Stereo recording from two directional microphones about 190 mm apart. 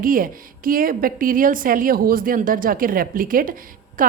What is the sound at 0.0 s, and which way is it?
A woman's voice, 45° right (ahead or behind).